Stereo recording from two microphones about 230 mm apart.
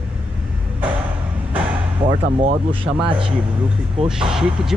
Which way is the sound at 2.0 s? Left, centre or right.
Right.